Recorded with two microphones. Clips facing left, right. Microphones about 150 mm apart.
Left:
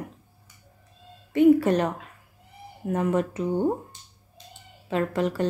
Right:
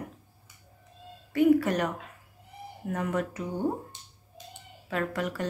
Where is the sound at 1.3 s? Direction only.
25° left (ahead or behind).